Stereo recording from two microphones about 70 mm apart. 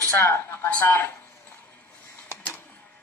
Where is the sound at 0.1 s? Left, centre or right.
Left.